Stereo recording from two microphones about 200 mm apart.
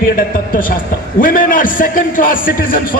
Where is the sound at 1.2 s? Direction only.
45° left (ahead or behind).